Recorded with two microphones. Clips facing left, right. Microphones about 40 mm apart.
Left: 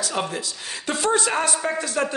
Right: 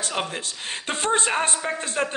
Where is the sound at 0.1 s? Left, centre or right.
Right.